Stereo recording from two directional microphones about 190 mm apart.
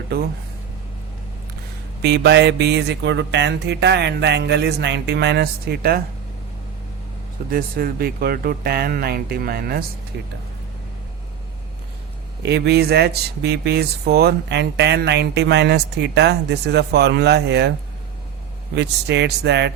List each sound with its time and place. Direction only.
2.0 s speech: 60° right (ahead or behind)
7.5 s speech: 50° right (ahead or behind)
12.4 s speech: 60° right (ahead or behind)
18.8 s speech: 65° right (ahead or behind)